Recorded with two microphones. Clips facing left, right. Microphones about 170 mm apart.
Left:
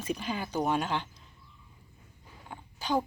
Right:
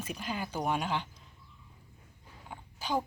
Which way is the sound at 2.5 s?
5° right (ahead or behind).